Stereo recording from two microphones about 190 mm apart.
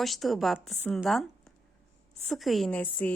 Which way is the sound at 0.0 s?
Centre (ahead or behind).